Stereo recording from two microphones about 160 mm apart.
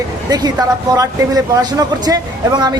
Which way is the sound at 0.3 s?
25° right (ahead or behind).